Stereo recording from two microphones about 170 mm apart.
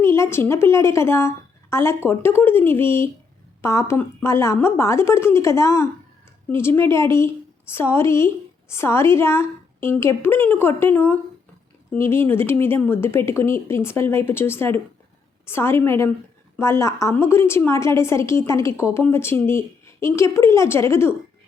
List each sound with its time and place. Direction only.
0.0 s a woman's voice: 15° left (ahead or behind)